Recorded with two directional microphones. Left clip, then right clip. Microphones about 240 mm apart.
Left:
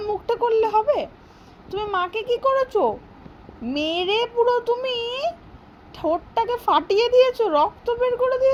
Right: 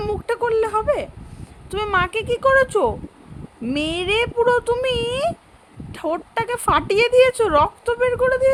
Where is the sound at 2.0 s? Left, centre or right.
Centre.